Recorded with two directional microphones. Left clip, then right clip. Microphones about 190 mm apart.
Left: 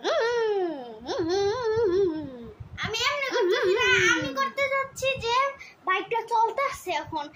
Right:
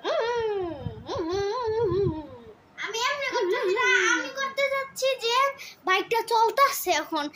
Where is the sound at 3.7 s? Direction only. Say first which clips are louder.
Right 1 dB; 40° left (ahead or behind).